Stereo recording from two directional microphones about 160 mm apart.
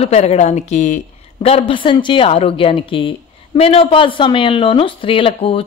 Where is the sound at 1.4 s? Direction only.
35° left (ahead or behind).